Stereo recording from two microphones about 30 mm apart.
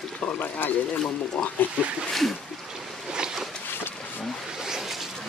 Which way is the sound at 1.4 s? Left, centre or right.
Left.